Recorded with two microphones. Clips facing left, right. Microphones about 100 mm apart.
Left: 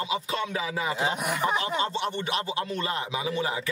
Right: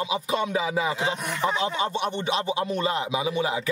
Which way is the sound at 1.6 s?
15° right (ahead or behind).